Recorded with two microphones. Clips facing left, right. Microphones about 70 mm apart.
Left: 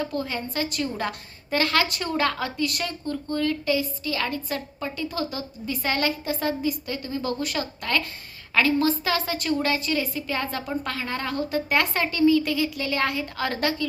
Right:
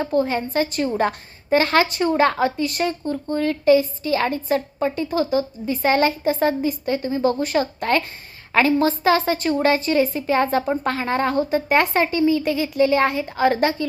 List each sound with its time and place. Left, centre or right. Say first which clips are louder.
0.0 s a woman's voice: right 8 dB; right